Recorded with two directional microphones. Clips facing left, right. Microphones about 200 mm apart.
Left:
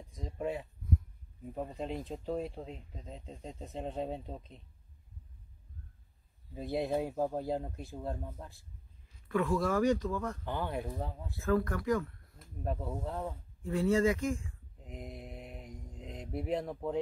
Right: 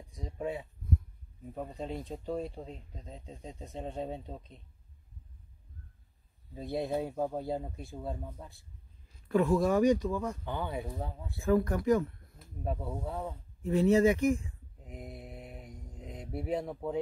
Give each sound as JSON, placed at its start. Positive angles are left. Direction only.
{"t": 0.0, "sound": "speech", "side_deg": 0}
{"t": 6.5, "sound": "speech", "side_deg": 0}
{"t": 9.3, "sound": "speech", "side_deg": -25}
{"t": 10.4, "sound": "speech", "side_deg": 0}
{"t": 11.3, "sound": "speech", "side_deg": -15}
{"t": 12.6, "sound": "speech", "side_deg": -5}
{"t": 13.6, "sound": "speech", "side_deg": -20}
{"t": 14.8, "sound": "speech", "side_deg": -5}